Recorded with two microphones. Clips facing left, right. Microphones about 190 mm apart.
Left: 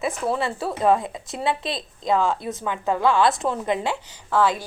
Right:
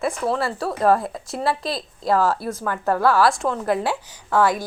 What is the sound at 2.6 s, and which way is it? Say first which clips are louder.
Speech: right 2 dB; 15° left (ahead or behind).